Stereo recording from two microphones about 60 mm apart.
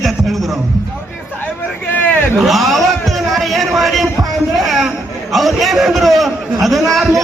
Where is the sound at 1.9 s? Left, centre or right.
Left.